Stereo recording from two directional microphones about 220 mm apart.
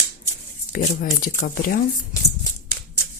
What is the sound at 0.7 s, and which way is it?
Speech, 40° left (ahead or behind).